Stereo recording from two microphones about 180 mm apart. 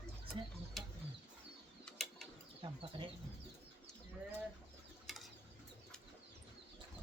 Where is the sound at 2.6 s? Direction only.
25° right (ahead or behind).